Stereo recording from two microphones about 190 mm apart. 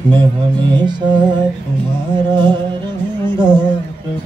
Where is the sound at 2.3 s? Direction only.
25° right (ahead or behind).